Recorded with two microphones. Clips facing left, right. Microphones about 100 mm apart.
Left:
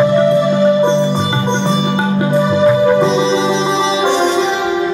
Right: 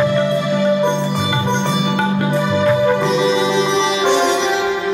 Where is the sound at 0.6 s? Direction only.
25° left (ahead or behind).